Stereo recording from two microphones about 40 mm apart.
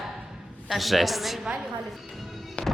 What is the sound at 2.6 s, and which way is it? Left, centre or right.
Music, left.